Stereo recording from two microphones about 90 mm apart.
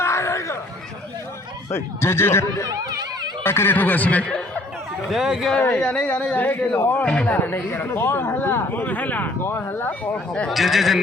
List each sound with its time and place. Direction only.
0.0 s a sound: 30° left (ahead or behind)
1.7 s speech: 30° left (ahead or behind)
2.6 s speech: 45° right (ahead or behind)
3.4 s speech: 25° left (ahead or behind)
5.1 s speech: 5° right (ahead or behind)
5.8 s speech: 15° left (ahead or behind)
7.3 s speech: 25° left (ahead or behind)
10.5 s speech: centre (ahead or behind)